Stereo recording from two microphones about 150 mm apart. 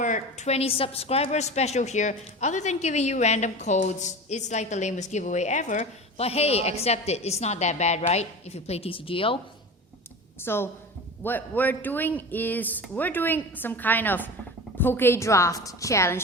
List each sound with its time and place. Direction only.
0.0 s a woman's voice: 55° left (ahead or behind); by 9.4 s 35° left (ahead or behind)
10.4 s a woman's voice: 15° left (ahead or behind)